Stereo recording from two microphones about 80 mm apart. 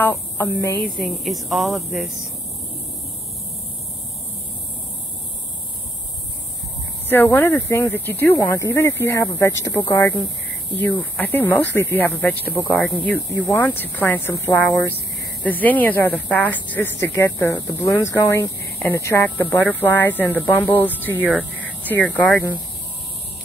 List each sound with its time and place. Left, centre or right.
0.4 s speech: left
1.2 s speech: centre
7.1 s speech: left
10.8 s speech: left
13.5 s speech: left
14.3 s speech: left
15.4 s speech: left
17.1 s speech: left
19.2 s speech: left